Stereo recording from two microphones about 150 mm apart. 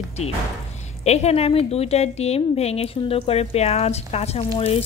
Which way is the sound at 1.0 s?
45° left (ahead or behind).